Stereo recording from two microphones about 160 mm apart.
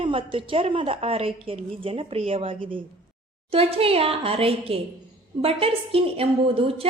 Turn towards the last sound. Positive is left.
turn(degrees=-35)  # may be behind; listen again after turning